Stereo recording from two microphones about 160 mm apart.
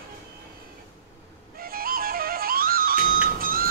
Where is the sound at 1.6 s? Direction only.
65° right (ahead or behind).